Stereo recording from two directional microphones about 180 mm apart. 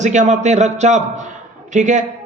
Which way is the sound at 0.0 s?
40° right (ahead or behind).